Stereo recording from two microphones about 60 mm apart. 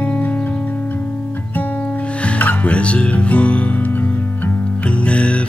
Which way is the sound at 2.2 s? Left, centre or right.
Left.